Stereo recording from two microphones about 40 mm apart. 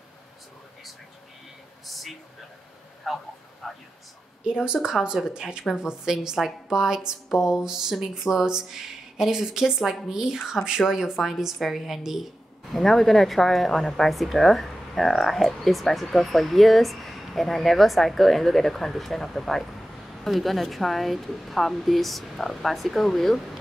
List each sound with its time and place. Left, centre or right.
1.9 s a sound: centre
3.1 s a woman's voice: centre
3.6 s a sound: centre
4.5 s speech: right
10.8 s speech: centre
12.7 s a woman's voice: centre